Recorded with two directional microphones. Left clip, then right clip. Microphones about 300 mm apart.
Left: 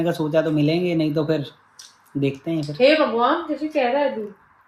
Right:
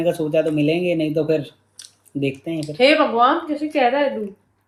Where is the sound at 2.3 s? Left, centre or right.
Left.